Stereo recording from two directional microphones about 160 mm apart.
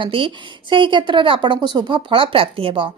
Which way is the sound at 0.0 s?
35° right (ahead or behind).